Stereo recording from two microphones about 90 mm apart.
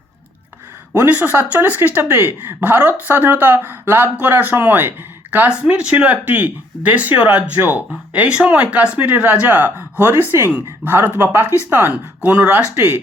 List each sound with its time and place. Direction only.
0.9 s speech: 20° right (ahead or behind)